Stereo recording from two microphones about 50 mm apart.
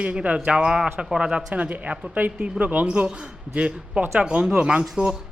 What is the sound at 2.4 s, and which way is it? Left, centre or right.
A man's voice, right.